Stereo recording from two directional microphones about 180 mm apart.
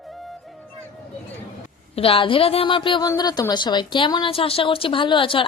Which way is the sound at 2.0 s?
30° left (ahead or behind).